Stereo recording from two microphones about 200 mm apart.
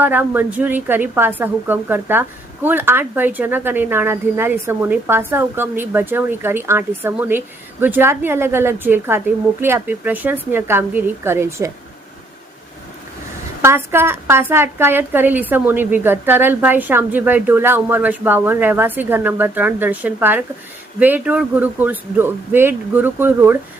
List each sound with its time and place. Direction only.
0.0 s a woman's voice: 10° right (ahead or behind)
13.6 s a woman's voice: 10° right (ahead or behind)